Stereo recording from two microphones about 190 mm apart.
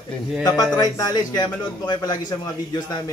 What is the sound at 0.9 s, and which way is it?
Speech, 20° left (ahead or behind).